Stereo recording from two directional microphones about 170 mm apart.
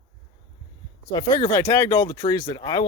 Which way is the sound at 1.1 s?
25° left (ahead or behind).